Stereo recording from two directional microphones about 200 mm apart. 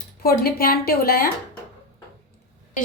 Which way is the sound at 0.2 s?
50° left (ahead or behind).